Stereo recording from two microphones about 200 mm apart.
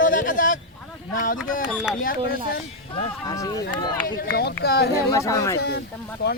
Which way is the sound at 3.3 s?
15° left (ahead or behind).